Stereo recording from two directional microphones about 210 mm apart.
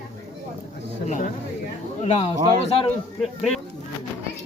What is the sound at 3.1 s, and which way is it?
Speech, centre (ahead or behind).